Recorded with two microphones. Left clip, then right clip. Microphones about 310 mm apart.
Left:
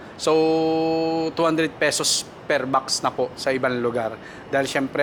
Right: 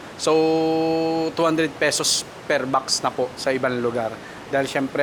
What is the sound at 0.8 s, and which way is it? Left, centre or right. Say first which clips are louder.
Mantra: right 1 dB; right.